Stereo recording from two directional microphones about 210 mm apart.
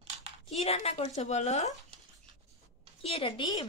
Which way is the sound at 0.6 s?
30° left (ahead or behind).